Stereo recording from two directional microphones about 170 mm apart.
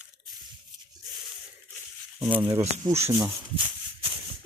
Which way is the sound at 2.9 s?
15° right (ahead or behind).